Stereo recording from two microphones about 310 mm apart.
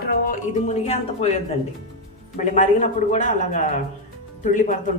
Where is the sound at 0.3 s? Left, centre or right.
Left.